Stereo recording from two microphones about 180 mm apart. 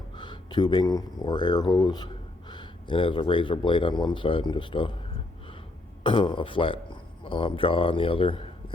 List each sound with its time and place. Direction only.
0.2 s speech: 25° left (ahead or behind)
6.0 s speech: 30° left (ahead or behind)